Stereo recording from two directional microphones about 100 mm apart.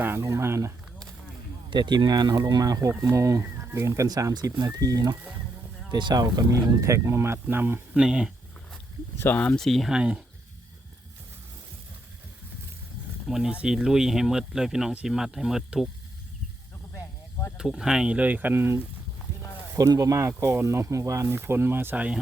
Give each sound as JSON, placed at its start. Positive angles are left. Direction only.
{"t": 0.0, "sound": "a sound", "side_deg": -25}
{"t": 1.7, "sound": "speech", "side_deg": -50}
{"t": 7.9, "sound": "speech", "side_deg": -10}
{"t": 9.1, "sound": "speech", "side_deg": 20}
{"t": 13.2, "sound": "speech", "side_deg": -5}
{"t": 17.6, "sound": "speech", "side_deg": -5}
{"t": 19.7, "sound": "speech", "side_deg": -35}